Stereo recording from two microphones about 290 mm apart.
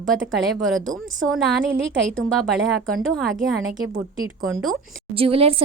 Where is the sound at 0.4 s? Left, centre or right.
Centre.